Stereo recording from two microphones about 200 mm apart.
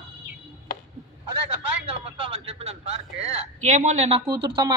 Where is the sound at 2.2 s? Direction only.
30° right (ahead or behind).